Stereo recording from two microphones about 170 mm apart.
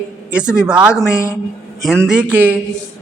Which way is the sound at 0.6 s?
5° right (ahead or behind).